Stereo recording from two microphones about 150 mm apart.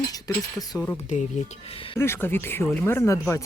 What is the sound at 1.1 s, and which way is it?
Speech, 50° left (ahead or behind).